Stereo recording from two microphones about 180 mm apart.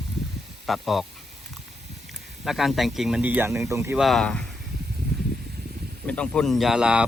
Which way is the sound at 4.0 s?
Centre (ahead or behind).